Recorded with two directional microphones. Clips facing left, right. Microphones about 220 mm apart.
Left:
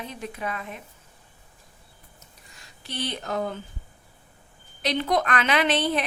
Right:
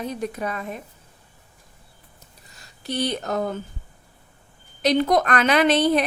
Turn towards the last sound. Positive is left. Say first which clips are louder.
# right 5 dB
turn(degrees=-40)  # may be behind; listen again after turning